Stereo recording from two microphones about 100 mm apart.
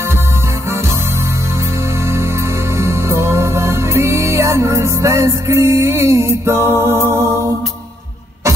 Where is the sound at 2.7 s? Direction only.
25° right (ahead or behind).